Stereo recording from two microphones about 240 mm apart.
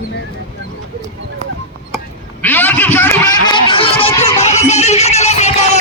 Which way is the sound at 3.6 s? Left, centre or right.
Left.